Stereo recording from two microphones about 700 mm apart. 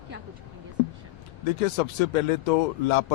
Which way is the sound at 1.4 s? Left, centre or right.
Left.